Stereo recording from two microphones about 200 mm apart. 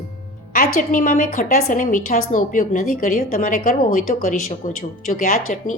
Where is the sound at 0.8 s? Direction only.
40° left (ahead or behind).